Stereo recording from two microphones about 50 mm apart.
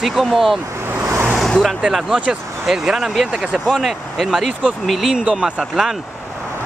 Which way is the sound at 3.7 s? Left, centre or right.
Centre.